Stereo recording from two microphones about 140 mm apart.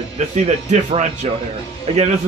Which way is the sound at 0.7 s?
60° right (ahead or behind).